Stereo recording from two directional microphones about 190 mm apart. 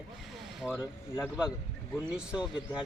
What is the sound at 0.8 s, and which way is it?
Speech, 15° left (ahead or behind).